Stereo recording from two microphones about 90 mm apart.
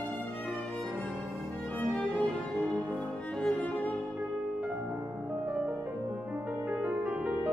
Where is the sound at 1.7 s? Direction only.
15° left (ahead or behind).